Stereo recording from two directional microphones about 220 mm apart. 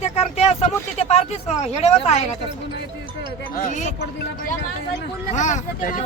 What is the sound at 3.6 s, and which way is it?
Speech, 35° left (ahead or behind).